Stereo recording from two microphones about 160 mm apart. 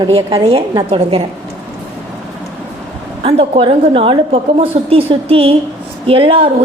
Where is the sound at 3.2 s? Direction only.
35° right (ahead or behind).